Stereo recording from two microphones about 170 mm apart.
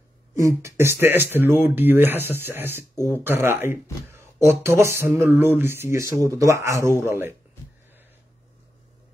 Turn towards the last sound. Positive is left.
turn(degrees=-15)  # may be behind; listen again after turning